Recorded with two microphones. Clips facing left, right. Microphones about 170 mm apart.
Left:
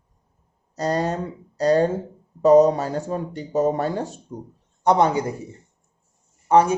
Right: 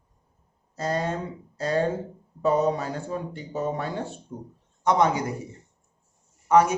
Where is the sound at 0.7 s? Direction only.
40° left (ahead or behind).